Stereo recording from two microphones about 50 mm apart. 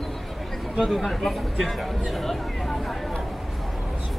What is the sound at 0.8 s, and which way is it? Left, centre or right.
Speech, centre.